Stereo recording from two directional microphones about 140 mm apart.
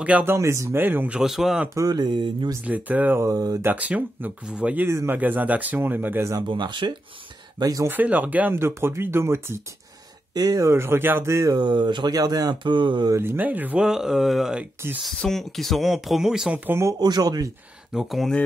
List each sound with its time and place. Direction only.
0.0 s speech: 15° right (ahead or behind)
1.8 s speech: 30° right (ahead or behind)
2.6 s speech: 10° right (ahead or behind)
3.7 s speech: 10° right (ahead or behind)
6.4 s speech: 35° right (ahead or behind)
7.9 s speech: 10° right (ahead or behind); by 13.1 s 35° right (ahead or behind)
13.1 s speech: 15° right (ahead or behind)
17.0 s speech: 30° right (ahead or behind)
17.9 s speech: centre (ahead or behind)